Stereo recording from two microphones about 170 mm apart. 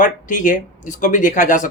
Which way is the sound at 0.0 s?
50° left (ahead or behind).